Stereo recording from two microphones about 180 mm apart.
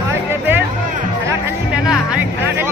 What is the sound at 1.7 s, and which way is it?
Speech, 5° right (ahead or behind).